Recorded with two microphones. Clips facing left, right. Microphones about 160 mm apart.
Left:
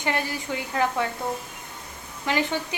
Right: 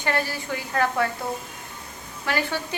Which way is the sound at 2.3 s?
15° left (ahead or behind).